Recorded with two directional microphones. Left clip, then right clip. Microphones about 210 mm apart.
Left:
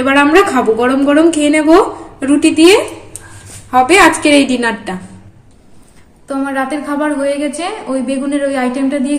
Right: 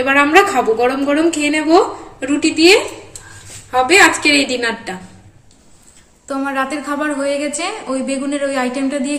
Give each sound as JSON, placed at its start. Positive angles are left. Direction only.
{"t": 0.6, "sound": "a woman's voice", "side_deg": 25}
{"t": 6.2, "sound": "a woman's voice", "side_deg": -5}